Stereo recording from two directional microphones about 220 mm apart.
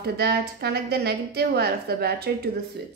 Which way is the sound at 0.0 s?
45° right (ahead or behind).